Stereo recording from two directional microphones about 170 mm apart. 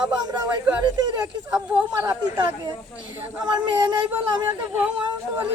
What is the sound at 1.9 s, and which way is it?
Speech, 20° right (ahead or behind).